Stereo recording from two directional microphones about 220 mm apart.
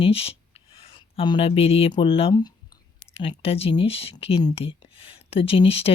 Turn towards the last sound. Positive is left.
turn(degrees=25)  # may be behind; listen again after turning